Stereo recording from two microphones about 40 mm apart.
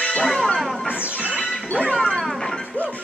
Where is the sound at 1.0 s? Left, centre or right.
Right.